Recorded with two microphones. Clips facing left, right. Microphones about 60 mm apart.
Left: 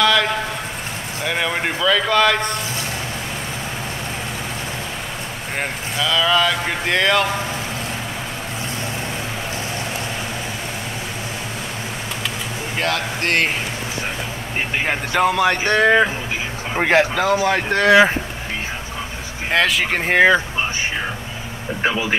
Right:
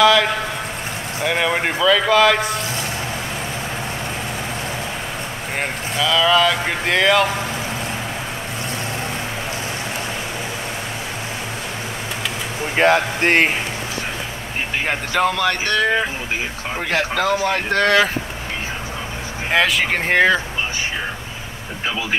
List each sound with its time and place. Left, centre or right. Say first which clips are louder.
0.0 s a sound: right 3 dB; centre
1.2 s speech: right 2 dB; centre
5.6 s speech: right 1 dB; centre
12.7 s speech: right 7 dB; right
14.9 s speech: left 1 dB; centre
15.8 s speech: left 4 dB; left
17.1 s speech: left 1 dB; centre
19.5 s speech: even; centre